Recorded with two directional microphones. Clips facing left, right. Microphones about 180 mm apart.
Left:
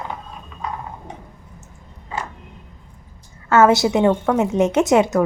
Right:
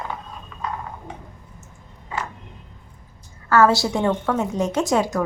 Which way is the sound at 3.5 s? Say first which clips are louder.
Left 3 dB; 20° left (ahead or behind).